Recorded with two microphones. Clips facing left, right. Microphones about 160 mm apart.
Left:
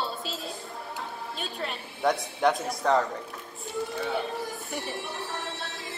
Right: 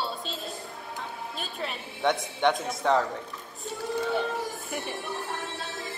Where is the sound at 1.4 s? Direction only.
Centre (ahead or behind).